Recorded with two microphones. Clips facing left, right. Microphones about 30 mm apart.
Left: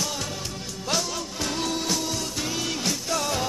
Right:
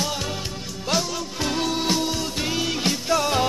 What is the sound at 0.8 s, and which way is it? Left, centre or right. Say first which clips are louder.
Music: right 3 dB; centre.